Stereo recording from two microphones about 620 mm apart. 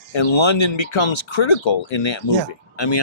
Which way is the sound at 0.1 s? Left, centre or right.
Left.